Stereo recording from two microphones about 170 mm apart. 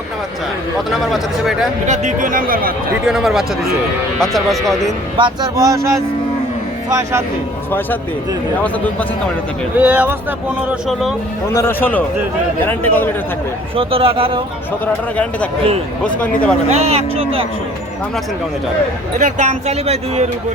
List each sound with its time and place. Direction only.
0.9 s speech: centre (ahead or behind)
1.9 s a man's voice: 50° right (ahead or behind)
3.1 s speech: centre (ahead or behind)
5.1 s speech: 25° right (ahead or behind)
9.7 s speech: 10° right (ahead or behind)
11.5 s a man's voice: 15° left (ahead or behind)
13.7 s speech: 35° right (ahead or behind)
15.1 s a man's voice: 5° left (ahead or behind)
16.6 s speech: 40° right (ahead or behind)
19.2 s speech: 40° right (ahead or behind)